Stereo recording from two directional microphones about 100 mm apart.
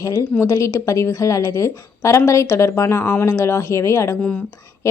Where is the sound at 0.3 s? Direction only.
25° left (ahead or behind).